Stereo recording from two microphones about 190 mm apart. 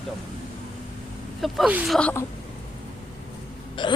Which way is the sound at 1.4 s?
Centre (ahead or behind).